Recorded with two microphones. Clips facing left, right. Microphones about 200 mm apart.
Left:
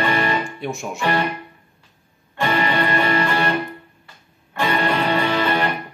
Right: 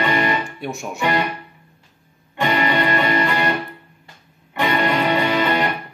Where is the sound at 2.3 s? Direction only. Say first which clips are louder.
Right 1 dB; 15° right (ahead or behind).